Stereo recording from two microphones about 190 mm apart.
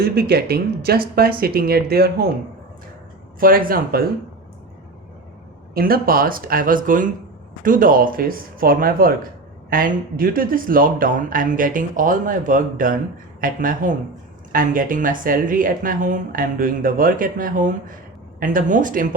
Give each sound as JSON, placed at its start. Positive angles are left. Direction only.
{"t": 0.0, "sound": "speech", "side_deg": -55}
{"t": 3.4, "sound": "speech", "side_deg": -50}
{"t": 5.7, "sound": "speech", "side_deg": -50}